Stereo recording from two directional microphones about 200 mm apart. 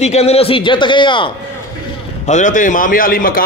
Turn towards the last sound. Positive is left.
turn(degrees=45)  # may be behind; listen again after turning